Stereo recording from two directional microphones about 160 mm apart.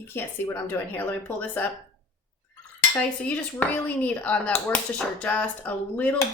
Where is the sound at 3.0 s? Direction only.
10° left (ahead or behind).